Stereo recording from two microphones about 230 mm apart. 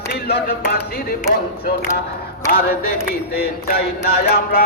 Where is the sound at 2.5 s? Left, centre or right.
Left.